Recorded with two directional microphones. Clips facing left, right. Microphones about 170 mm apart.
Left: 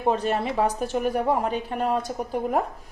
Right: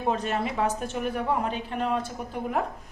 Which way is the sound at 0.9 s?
40° left (ahead or behind).